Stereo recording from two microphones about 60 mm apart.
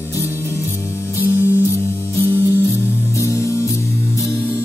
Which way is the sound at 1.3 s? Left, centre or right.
Left.